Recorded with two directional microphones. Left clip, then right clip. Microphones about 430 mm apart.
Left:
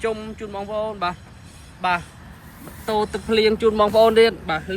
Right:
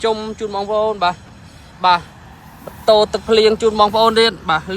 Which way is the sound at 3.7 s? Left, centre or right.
Right.